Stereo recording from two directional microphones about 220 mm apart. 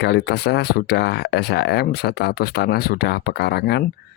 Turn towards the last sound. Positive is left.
turn(degrees=50)  # may be behind; listen again after turning